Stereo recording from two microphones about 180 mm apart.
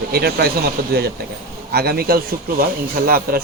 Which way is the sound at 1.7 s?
60° right (ahead or behind).